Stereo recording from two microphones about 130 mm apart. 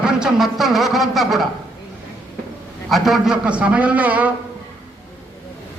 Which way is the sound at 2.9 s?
Centre (ahead or behind).